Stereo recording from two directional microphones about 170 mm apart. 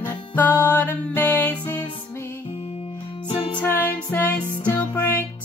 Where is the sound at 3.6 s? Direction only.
10° left (ahead or behind).